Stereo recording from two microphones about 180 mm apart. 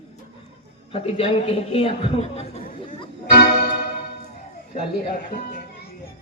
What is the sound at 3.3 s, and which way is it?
Music, 65° left (ahead or behind).